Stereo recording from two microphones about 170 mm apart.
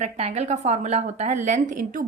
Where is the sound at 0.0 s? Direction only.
40° right (ahead or behind).